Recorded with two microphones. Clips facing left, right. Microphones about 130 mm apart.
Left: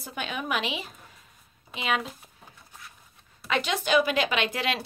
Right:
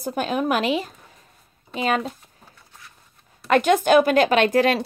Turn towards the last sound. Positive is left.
turn(degrees=-45)  # may be behind; listen again after turning